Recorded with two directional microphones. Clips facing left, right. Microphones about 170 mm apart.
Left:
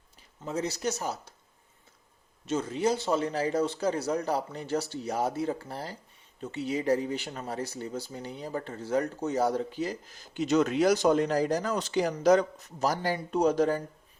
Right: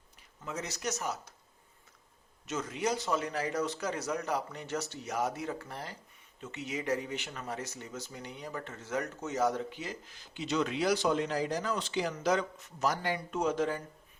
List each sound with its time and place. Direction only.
0.4 s speech: 30° left (ahead or behind)
2.5 s speech: 30° left (ahead or behind)